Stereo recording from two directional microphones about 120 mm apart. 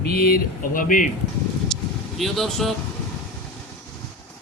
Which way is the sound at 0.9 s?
90° left.